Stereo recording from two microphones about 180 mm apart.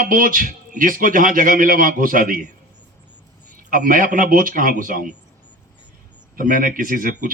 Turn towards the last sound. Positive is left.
turn(degrees=-50)  # may be behind; listen again after turning